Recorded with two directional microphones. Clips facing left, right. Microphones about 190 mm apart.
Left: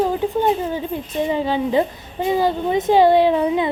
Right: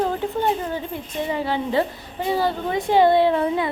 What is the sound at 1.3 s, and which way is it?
A woman's voice, 20° left (ahead or behind).